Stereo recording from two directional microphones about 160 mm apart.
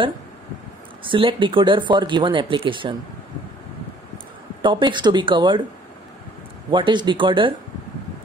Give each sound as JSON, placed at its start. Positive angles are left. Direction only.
{"t": 1.0, "sound": "speech", "side_deg": -30}
{"t": 4.6, "sound": "speech", "side_deg": -30}
{"t": 6.7, "sound": "speech", "side_deg": -30}